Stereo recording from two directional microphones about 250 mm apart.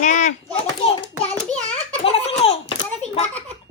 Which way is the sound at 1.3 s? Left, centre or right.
Centre.